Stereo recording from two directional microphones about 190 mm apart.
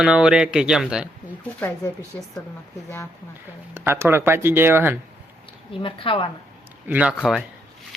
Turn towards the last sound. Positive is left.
turn(degrees=0)  # may be behind; listen again after turning